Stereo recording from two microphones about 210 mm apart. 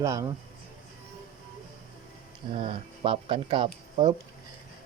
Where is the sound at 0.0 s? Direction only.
15° right (ahead or behind).